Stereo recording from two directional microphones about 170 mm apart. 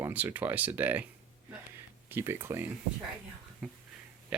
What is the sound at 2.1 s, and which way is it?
Speech, 15° right (ahead or behind).